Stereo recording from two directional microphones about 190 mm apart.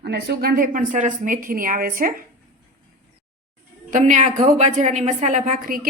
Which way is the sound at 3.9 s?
40° right (ahead or behind).